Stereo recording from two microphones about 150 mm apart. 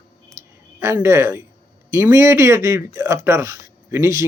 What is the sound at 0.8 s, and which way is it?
Speech, 20° right (ahead or behind).